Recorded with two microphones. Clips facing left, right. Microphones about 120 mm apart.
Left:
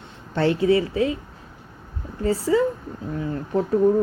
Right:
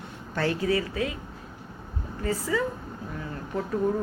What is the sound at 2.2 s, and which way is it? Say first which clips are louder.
Speech: left 7 dB; 30° left (ahead or behind).